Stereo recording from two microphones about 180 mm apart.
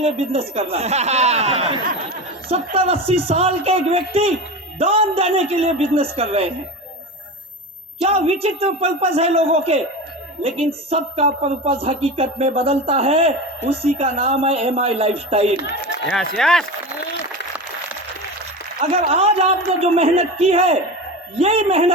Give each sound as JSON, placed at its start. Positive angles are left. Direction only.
{"t": 0.0, "sound": "speech", "side_deg": -35}
{"t": 8.0, "sound": "speech", "side_deg": -35}
{"t": 10.8, "sound": "speech", "side_deg": -35}
{"t": 16.0, "sound": "speech", "side_deg": 5}
{"t": 18.9, "sound": "speech", "side_deg": -35}